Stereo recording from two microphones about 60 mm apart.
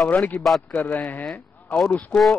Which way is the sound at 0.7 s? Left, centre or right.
Left.